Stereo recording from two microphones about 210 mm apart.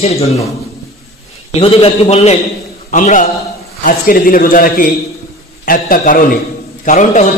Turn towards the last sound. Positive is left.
turn(degrees=35)  # may be behind; listen again after turning